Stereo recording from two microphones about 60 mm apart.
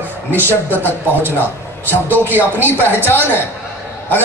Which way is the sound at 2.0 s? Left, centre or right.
Right.